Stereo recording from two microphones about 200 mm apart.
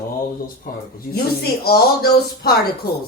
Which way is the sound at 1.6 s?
50° left (ahead or behind).